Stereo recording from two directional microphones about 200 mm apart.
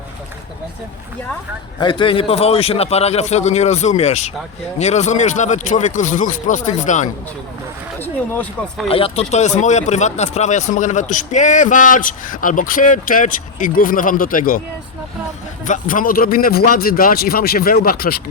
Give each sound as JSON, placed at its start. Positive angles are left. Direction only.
{"t": 1.8, "sound": "speech", "side_deg": 25}
{"t": 7.9, "sound": "speech", "side_deg": 10}
{"t": 8.9, "sound": "speech", "side_deg": 30}
{"t": 15.6, "sound": "a man's voice", "side_deg": 40}